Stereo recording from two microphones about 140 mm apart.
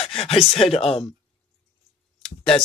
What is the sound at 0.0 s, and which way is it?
Speech, 40° left (ahead or behind).